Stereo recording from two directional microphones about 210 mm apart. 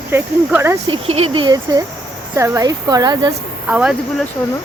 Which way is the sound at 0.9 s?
30° right (ahead or behind).